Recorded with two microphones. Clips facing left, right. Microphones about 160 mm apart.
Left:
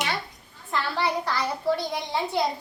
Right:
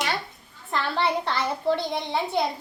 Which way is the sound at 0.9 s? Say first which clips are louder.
Right 2 dB; 25° right (ahead or behind).